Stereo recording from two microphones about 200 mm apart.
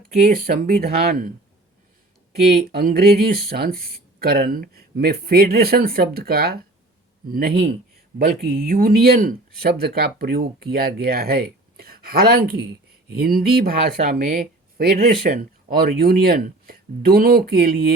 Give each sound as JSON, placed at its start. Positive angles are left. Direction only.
{"t": 0.1, "sound": "speech", "side_deg": -45}
{"t": 2.3, "sound": "speech", "side_deg": -50}